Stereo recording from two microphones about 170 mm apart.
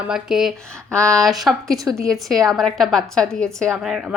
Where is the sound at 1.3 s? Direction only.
Centre (ahead or behind).